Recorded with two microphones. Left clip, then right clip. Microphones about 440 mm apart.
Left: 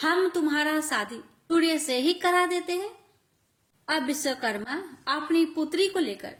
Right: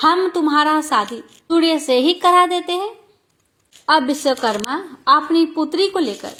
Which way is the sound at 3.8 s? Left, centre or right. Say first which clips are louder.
Right 12 dB; left.